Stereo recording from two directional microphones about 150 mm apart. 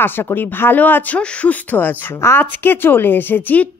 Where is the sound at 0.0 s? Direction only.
15° left (ahead or behind).